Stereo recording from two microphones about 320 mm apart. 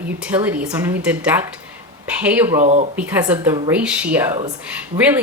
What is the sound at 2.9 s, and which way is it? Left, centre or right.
Speech, centre.